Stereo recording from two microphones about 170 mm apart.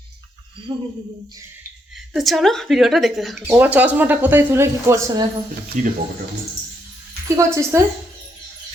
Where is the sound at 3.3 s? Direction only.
10° right (ahead or behind).